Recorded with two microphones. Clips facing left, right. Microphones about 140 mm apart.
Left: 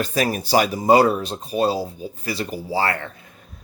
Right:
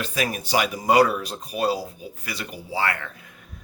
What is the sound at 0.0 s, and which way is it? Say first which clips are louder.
Speech: left 5 dB; 35° left (ahead or behind).